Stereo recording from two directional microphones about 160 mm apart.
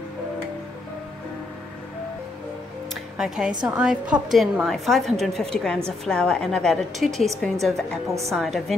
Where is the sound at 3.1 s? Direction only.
5° right (ahead or behind).